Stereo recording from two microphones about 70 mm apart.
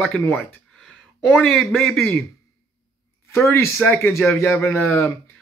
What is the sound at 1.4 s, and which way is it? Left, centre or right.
Speech, centre.